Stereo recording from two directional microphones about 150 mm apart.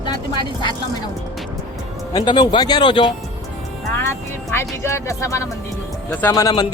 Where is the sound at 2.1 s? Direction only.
30° left (ahead or behind).